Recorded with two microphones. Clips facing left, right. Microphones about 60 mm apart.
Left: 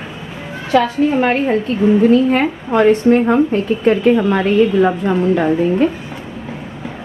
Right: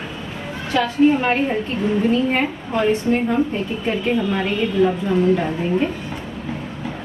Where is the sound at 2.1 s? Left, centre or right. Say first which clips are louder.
Left 6 dB; left.